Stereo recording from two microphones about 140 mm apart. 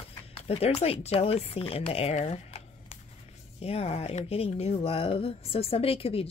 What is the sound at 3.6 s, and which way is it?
Speech, 45° left (ahead or behind).